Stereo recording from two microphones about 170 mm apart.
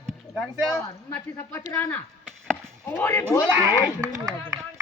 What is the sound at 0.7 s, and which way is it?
Speech, 15° left (ahead or behind).